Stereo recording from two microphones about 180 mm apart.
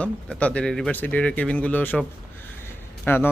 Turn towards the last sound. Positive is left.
turn(degrees=10)  # may be behind; listen again after turning